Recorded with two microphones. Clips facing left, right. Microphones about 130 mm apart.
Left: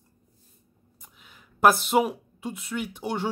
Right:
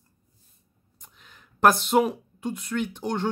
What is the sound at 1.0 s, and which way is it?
Speech, 5° left (ahead or behind).